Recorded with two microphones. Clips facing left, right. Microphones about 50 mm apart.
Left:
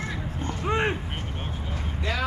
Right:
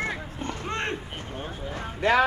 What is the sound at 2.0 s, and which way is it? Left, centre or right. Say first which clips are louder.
Speech: right 9 dB; right.